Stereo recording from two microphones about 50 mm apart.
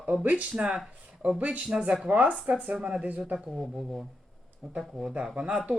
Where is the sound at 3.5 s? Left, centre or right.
Centre.